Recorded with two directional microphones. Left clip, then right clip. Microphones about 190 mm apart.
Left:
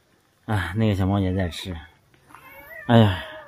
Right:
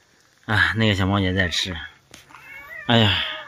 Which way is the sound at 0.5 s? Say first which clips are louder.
Right 7 dB; 10° left (ahead or behind).